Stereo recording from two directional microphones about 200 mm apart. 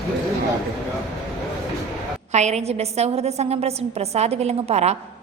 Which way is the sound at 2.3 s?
35° right (ahead or behind).